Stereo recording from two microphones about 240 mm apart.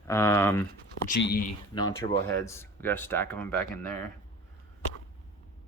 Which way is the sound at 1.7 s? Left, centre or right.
Centre.